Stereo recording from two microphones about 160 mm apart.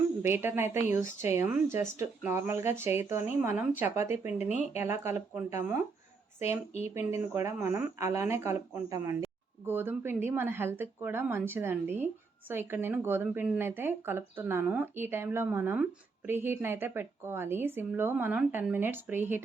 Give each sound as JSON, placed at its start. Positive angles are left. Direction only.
{"t": 0.2, "sound": "speech", "side_deg": -15}
{"t": 6.9, "sound": "speech", "side_deg": -15}